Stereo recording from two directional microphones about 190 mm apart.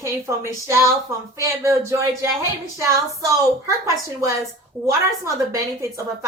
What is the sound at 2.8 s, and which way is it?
Speech, 15° right (ahead or behind).